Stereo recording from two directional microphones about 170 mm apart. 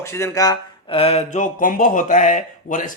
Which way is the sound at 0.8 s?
35° left (ahead or behind).